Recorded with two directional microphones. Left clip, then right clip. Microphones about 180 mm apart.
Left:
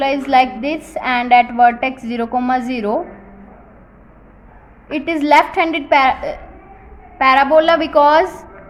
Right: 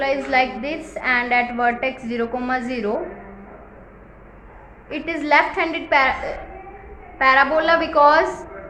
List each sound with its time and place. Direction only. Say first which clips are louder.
0.0 s a woman's voice: left 5 dB; 40° left (ahead or behind)
4.9 s a woman's voice: left 5 dB; 40° left (ahead or behind)